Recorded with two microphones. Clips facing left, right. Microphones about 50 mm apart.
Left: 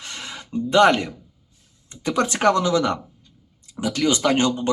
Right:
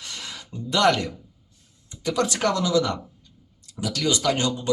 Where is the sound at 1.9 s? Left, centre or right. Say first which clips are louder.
Left 2 dB; left.